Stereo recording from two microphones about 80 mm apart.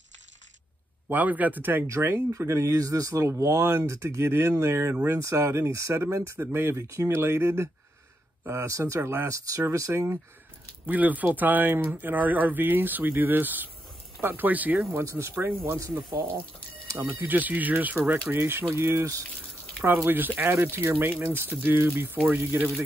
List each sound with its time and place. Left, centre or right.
1.0 s speech: right
10.9 s speech: right
14.9 s speech: right
17.0 s speech: right